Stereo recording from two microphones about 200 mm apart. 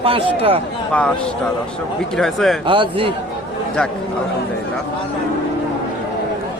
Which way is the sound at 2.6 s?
25° right (ahead or behind).